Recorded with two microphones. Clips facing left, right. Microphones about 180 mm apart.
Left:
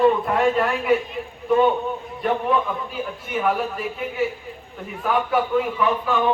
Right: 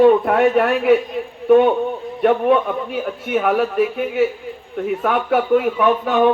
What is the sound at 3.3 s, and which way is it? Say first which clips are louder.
A man's voice: right 5 dB; 70° right (ahead or behind).